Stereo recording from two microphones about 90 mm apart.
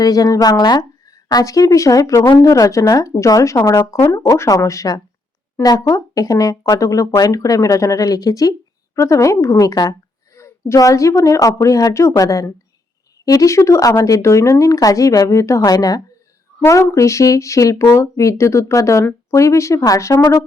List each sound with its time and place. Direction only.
0.0 s speech: 40° left (ahead or behind)